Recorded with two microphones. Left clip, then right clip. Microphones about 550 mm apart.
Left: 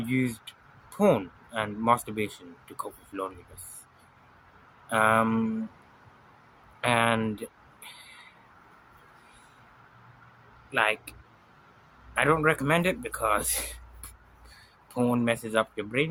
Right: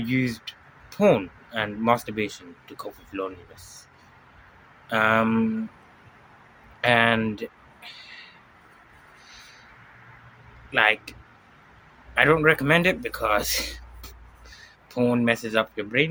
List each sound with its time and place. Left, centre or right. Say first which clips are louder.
0.0 s speech: right 3 dB; left
4.9 s speech: right 2 dB; left
6.8 s speech: right 5 dB; left
10.7 s speech: right 5 dB; left
12.1 s speech: right 5 dB; left
14.9 s speech: right 4 dB; left